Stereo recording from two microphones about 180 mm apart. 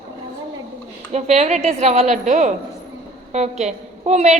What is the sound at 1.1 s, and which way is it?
A woman's voice, 35° right (ahead or behind).